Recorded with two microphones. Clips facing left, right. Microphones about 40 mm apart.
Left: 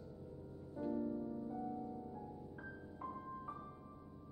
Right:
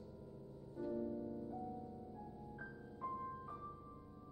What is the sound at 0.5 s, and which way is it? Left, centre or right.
Music, left.